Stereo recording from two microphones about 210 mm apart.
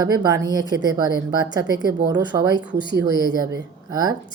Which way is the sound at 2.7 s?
50° right (ahead or behind).